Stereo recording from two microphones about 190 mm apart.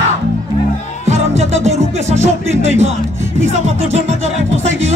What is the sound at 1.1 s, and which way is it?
Music, 35° right (ahead or behind).